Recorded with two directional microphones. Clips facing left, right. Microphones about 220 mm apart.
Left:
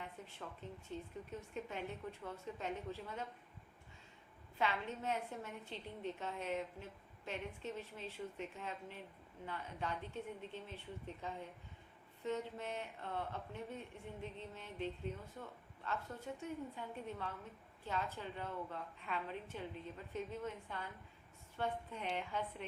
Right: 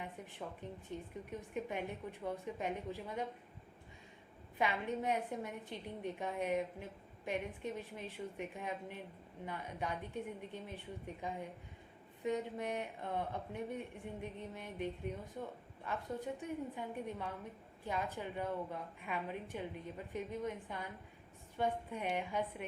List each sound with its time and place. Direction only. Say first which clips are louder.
0.0 s a sound: right 4 dB; 15° right (ahead or behind)
0.9 s a woman's voice: right 1 dB; 15° right (ahead or behind)
4.5 s a woman's voice: right 3 dB; 15° right (ahead or behind)